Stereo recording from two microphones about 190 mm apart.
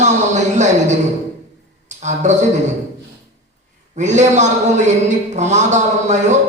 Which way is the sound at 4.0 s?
40° right (ahead or behind).